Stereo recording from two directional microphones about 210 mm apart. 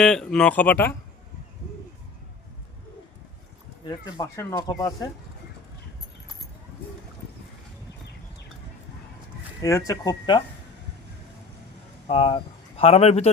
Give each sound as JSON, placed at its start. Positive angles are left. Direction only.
{"t": 0.0, "sound": "speech", "side_deg": 0}
{"t": 3.8, "sound": "speech", "side_deg": 15}
{"t": 9.6, "sound": "speech", "side_deg": 15}
{"t": 12.0, "sound": "speech", "side_deg": 25}